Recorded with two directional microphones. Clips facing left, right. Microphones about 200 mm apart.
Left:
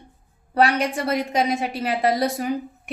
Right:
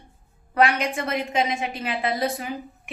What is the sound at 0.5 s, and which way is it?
A woman's voice, 35° left (ahead or behind).